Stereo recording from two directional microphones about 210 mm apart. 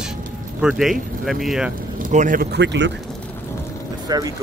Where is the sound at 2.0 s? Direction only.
40° right (ahead or behind).